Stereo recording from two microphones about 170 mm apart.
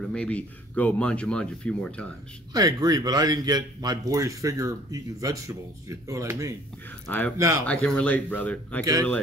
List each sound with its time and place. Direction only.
0.0 s speech: 5° left (ahead or behind)
2.5 s speech: 25° right (ahead or behind)
7.1 s speech: 10° left (ahead or behind)
7.3 s speech: 20° right (ahead or behind)
7.6 s speech: 5° left (ahead or behind)